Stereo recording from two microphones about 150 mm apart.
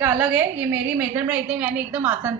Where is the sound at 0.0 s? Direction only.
10° right (ahead or behind).